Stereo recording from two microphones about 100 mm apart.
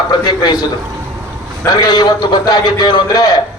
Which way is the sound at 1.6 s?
40° left (ahead or behind).